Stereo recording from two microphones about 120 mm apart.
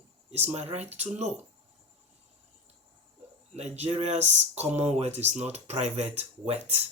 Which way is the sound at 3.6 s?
65° right (ahead or behind).